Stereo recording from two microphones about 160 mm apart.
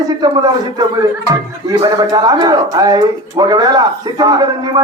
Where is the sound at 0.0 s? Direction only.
25° right (ahead or behind).